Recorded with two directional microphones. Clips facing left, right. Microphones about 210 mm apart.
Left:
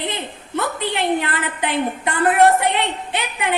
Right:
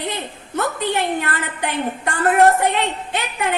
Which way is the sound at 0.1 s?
45° right (ahead or behind).